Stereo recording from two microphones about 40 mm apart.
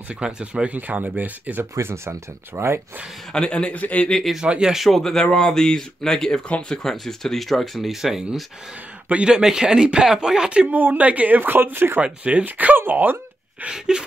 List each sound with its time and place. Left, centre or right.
0.2 s speech: right
0.7 s speech: right
1.6 s speech: right
3.3 s a man's voice: left
3.7 s speech: left
4.5 s speech: right
4.9 s speech: centre
10.7 s speech: right
12.0 s speech: right
12.4 s speech: right
13.7 s speech: right